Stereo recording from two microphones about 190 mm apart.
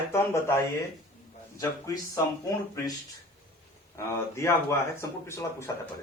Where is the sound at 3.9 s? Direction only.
15° left (ahead or behind).